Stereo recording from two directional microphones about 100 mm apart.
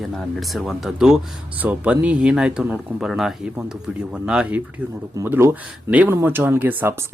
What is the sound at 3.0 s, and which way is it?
Speech, 5° right (ahead or behind).